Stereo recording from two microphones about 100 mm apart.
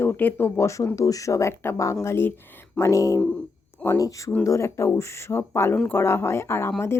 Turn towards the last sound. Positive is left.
turn(degrees=25)  # may be behind; listen again after turning